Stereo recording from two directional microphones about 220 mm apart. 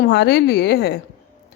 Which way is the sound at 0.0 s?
50° left (ahead or behind).